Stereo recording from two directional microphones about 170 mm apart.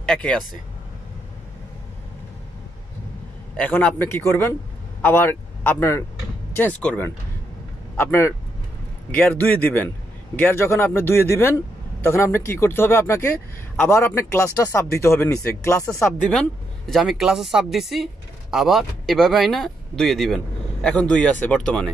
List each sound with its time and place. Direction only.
0.0 s speech: 5° left (ahead or behind)
3.5 s speech: 10° left (ahead or behind)
16.0 s speech: 5° left (ahead or behind)